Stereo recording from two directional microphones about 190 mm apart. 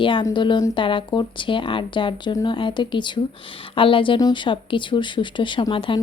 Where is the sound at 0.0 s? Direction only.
25° left (ahead or behind).